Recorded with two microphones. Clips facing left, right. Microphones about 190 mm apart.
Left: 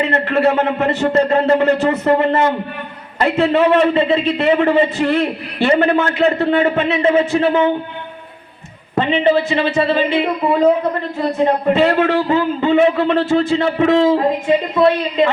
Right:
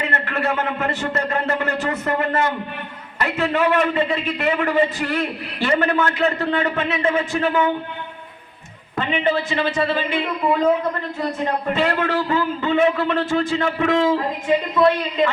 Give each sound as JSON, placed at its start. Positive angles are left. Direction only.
{"t": 0.0, "sound": "a man's voice", "side_deg": 25}
{"t": 9.0, "sound": "a man's voice", "side_deg": 20}
{"t": 11.7, "sound": "a man's voice", "side_deg": 25}